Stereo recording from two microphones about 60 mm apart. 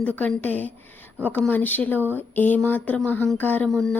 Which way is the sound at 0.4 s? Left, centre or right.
Left.